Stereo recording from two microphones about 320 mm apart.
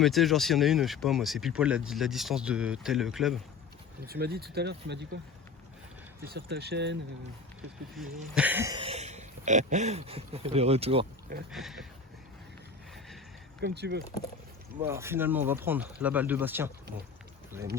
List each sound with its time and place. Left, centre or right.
0.0 s speech: centre
4.0 s speech: right
6.2 s speech: right
7.9 s speech: centre; by 11.4 s right
11.5 s speech: centre
13.6 s speech: right
14.8 s speech: centre